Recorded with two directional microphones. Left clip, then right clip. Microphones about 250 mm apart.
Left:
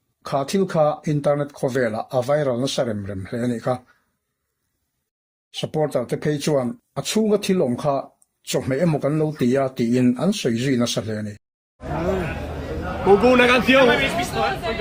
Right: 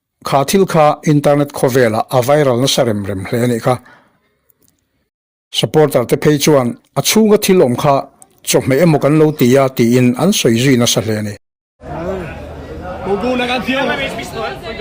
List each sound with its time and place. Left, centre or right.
0.3 s speech: right
5.5 s speech: right
11.8 s chatter: centre